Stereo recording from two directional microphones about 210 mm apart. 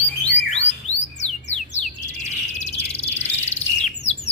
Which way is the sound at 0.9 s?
30° left (ahead or behind).